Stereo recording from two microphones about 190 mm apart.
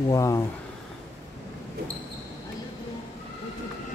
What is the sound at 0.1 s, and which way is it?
Speech, 15° left (ahead or behind).